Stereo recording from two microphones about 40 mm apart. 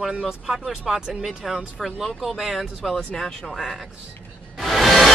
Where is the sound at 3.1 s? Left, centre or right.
Centre.